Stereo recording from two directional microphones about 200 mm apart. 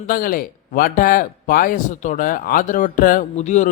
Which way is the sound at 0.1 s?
45° left (ahead or behind).